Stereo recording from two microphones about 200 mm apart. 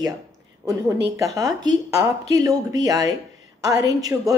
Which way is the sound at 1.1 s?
15° right (ahead or behind).